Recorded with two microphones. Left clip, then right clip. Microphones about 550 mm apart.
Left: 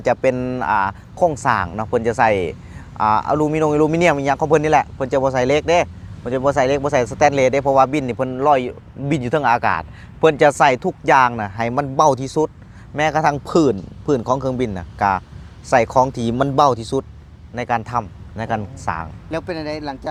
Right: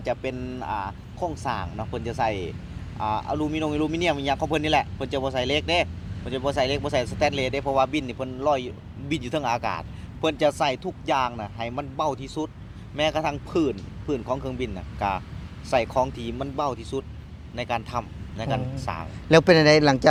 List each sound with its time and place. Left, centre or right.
0.0 s a man's voice: left
19.3 s speech: right